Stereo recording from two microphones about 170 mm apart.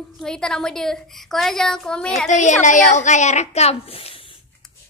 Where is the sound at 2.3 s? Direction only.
45° left (ahead or behind).